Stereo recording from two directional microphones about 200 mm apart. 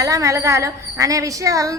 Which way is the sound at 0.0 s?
15° right (ahead or behind).